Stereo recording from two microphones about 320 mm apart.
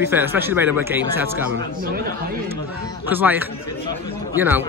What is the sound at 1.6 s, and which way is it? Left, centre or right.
Speech, right.